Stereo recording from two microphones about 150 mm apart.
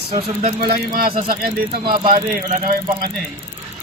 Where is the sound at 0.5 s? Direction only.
75° right (ahead or behind).